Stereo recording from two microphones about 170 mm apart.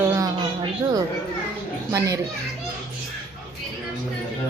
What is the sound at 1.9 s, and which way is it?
Speech, 20° right (ahead or behind).